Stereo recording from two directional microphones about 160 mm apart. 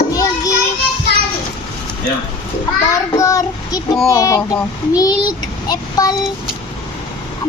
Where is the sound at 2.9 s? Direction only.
20° left (ahead or behind).